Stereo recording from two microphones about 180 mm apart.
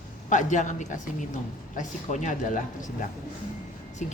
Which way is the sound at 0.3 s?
45° left (ahead or behind).